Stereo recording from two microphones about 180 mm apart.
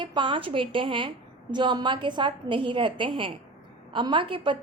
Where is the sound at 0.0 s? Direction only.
25° right (ahead or behind).